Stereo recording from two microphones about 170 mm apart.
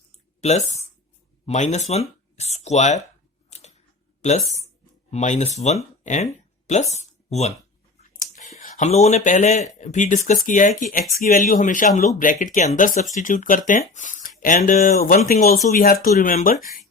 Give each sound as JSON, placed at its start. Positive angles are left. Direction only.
{"t": 0.4, "sound": "speech", "side_deg": 40}
{"t": 3.5, "sound": "scissors", "side_deg": 40}
{"t": 4.2, "sound": "speech", "side_deg": 45}
{"t": 6.9, "sound": "a sound", "side_deg": 40}
{"t": 8.2, "sound": "speech", "side_deg": 50}